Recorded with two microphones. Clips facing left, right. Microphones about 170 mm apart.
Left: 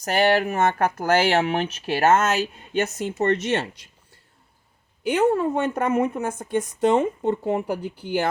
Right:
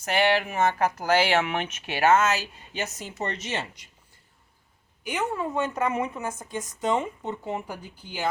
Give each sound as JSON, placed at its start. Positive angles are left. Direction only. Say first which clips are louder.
{"t": 0.0, "sound": "speech", "louder": "left 4 dB", "side_deg": 40}
{"t": 5.0, "sound": "speech", "louder": "left 9 dB", "side_deg": 60}